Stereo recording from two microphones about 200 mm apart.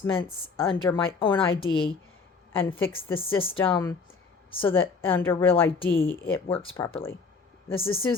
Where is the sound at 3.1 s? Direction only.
25° left (ahead or behind).